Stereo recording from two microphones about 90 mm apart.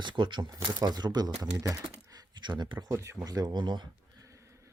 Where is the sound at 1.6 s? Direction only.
40° right (ahead or behind).